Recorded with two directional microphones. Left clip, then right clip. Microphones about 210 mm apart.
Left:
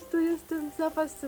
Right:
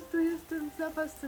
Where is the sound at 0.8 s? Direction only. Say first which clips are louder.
Left 6 dB; 30° left (ahead or behind).